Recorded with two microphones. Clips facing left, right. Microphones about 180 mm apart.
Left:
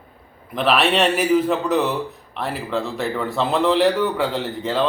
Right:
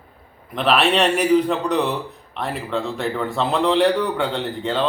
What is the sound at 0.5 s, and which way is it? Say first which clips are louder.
A man's voice: even; centre (ahead or behind).